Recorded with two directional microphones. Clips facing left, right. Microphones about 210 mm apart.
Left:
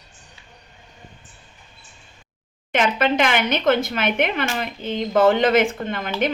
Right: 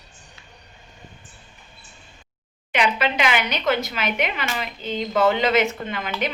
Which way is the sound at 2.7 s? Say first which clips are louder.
Left 3 dB; 45° left (ahead or behind).